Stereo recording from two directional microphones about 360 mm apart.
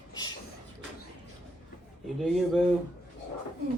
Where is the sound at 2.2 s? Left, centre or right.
Centre.